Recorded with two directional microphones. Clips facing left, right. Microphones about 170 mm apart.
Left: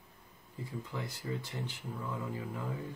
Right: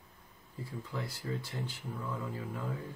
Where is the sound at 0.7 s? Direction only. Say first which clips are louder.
Even; 20° left (ahead or behind).